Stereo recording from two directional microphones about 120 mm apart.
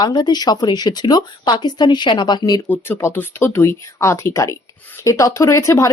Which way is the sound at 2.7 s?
20° left (ahead or behind).